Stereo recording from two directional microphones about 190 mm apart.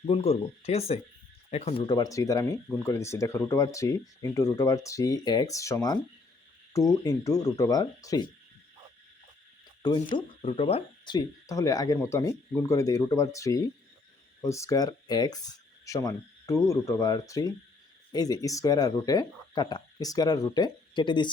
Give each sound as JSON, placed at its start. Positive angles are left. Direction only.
{"t": 0.0, "sound": "speech", "side_deg": 30}
{"t": 1.9, "sound": "speech", "side_deg": 20}
{"t": 10.2, "sound": "speech", "side_deg": 30}